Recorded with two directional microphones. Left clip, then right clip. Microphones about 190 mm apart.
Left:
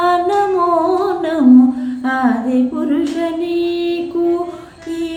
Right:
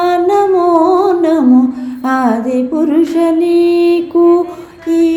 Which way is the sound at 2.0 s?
30° right (ahead or behind).